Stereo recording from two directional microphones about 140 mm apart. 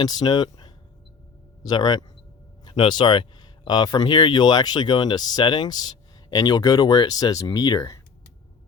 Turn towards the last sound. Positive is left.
turn(degrees=25)  # may be behind; listen again after turning